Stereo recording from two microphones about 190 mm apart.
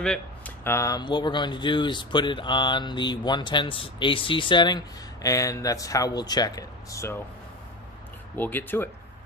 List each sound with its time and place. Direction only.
0.0 s speech: 5° left (ahead or behind)
8.4 s speech: 10° left (ahead or behind)